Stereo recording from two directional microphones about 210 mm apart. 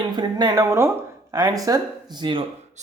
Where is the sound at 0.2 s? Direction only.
20° right (ahead or behind).